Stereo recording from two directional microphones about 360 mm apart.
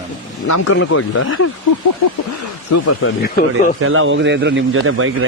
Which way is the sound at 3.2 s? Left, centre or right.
Left.